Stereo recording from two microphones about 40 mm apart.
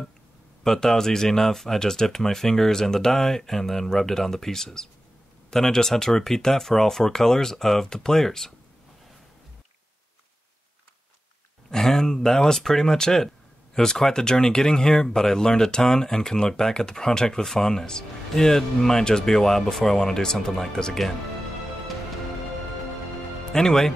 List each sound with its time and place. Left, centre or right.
0.7 s speech: centre
11.7 s speech: centre
23.5 s speech: centre